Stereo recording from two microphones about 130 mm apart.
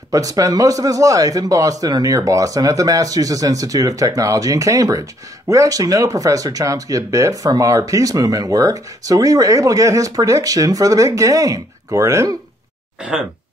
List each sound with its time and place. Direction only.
0.1 s speech: 25° right (ahead or behind)